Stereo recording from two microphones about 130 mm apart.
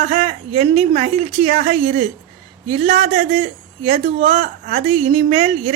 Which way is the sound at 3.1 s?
45° right (ahead or behind).